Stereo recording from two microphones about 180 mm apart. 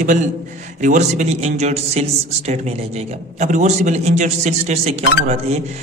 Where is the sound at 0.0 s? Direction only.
45° right (ahead or behind).